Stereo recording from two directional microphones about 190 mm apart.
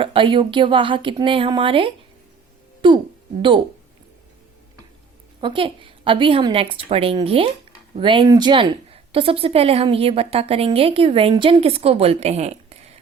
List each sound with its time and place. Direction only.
0.0 s a woman's voice: 25° right (ahead or behind)
5.4 s a woman's voice: 25° right (ahead or behind)